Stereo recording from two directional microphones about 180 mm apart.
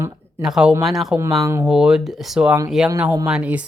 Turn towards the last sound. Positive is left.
turn(degrees=-5)  # may be behind; listen again after turning